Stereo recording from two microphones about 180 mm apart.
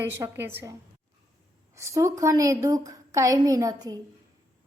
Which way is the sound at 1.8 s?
15° right (ahead or behind).